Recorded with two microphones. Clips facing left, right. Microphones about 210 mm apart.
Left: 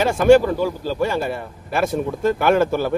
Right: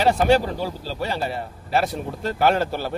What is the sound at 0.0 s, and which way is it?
A man's voice, 50° left (ahead or behind).